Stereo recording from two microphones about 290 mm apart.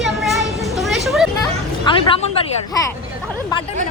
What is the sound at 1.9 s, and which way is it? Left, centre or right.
Speech, centre.